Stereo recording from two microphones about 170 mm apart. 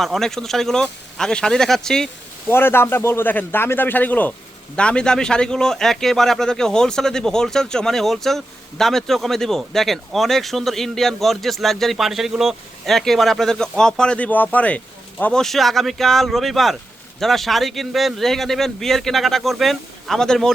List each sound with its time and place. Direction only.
0.0 s a man's voice: centre (ahead or behind)
2.5 s a man's voice: 15° left (ahead or behind)